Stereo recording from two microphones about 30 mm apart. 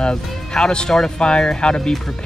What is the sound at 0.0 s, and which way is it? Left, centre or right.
Speech, left.